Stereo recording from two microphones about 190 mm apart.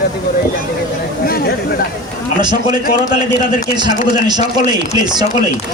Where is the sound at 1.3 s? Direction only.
55° left (ahead or behind).